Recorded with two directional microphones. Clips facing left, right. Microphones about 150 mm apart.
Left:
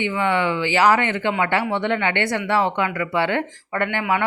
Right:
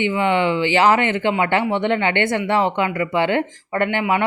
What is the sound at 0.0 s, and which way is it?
Speech, 20° right (ahead or behind).